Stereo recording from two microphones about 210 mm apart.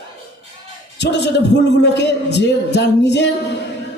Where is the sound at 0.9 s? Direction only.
55° left (ahead or behind).